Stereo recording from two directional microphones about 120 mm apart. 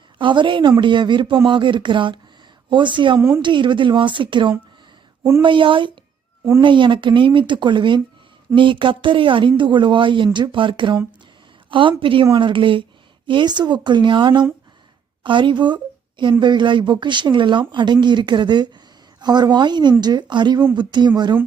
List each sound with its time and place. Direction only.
0.2 s speech: 45° right (ahead or behind)
3.2 s speech: 20° right (ahead or behind)
3.4 s a woman's voice: 40° right (ahead or behind)